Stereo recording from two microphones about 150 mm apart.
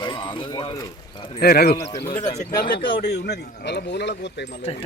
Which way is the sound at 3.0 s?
90° left.